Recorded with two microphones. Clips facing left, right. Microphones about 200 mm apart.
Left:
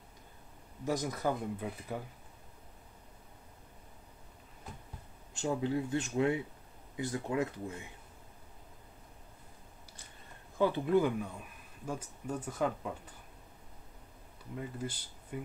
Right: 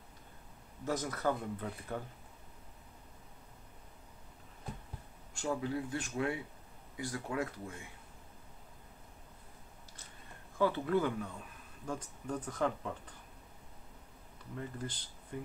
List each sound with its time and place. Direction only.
0.8 s speech: 15° left (ahead or behind)
5.3 s speech: 20° left (ahead or behind)
10.6 s speech: 15° left (ahead or behind)
14.6 s speech: 10° left (ahead or behind)